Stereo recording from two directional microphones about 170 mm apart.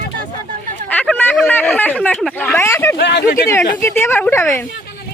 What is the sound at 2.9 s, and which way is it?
Speech, 80° left.